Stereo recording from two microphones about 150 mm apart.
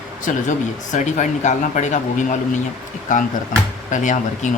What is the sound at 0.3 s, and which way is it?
Speech, 60° left (ahead or behind).